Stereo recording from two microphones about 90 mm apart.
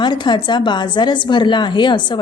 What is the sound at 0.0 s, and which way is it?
Speech, 55° left (ahead or behind).